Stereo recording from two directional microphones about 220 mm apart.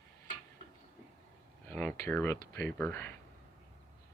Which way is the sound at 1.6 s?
5° left (ahead or behind).